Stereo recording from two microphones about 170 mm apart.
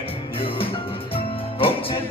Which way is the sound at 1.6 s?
35° left (ahead or behind).